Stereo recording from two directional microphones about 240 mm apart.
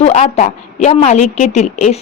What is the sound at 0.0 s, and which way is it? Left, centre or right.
Speech, left.